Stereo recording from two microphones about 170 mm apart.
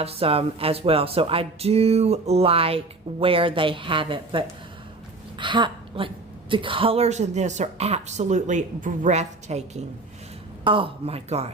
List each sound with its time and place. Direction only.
0.0 s a woman's voice: 35° right (ahead or behind)
10.6 s speech: 30° right (ahead or behind)